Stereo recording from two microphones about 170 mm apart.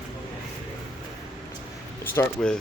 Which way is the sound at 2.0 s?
15° left (ahead or behind).